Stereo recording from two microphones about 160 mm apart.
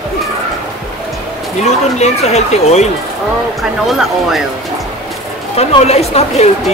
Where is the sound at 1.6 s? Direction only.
45° left (ahead or behind).